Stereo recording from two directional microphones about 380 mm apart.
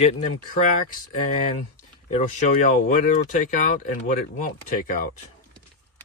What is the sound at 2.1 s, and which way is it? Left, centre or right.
Speech, centre.